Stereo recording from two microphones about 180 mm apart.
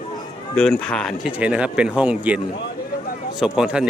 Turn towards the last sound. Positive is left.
turn(degrees=-5)  # may be behind; listen again after turning